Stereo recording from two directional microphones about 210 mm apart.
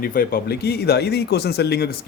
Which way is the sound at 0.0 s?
45° left (ahead or behind).